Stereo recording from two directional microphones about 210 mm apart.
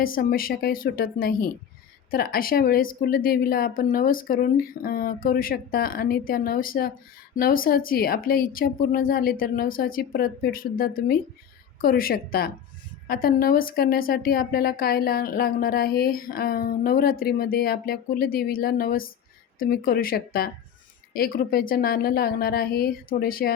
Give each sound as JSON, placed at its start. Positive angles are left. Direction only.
{"t": 0.0, "sound": "a woman's voice", "side_deg": 45}